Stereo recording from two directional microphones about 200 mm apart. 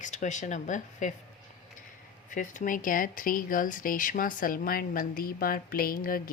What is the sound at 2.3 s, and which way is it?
Speech, 40° left (ahead or behind).